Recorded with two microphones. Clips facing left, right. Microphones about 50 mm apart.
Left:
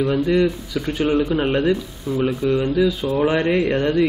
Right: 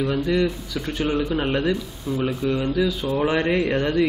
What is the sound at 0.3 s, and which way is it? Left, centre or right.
A man's voice, centre.